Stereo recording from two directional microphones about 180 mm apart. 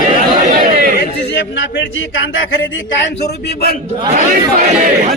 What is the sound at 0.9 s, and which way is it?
Speech, 75° left (ahead or behind).